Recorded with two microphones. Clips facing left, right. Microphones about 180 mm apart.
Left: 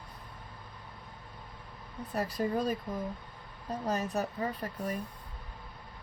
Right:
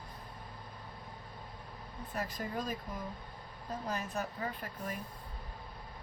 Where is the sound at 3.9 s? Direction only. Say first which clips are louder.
Left 7 dB; 40° left (ahead or behind).